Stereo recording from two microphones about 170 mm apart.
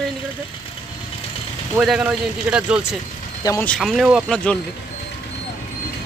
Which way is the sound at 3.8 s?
Centre (ahead or behind).